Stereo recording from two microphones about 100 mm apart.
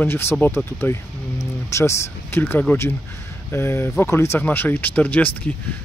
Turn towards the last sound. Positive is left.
turn(degrees=15)  # may be behind; listen again after turning